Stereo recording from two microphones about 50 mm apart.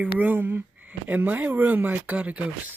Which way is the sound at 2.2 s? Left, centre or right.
Right.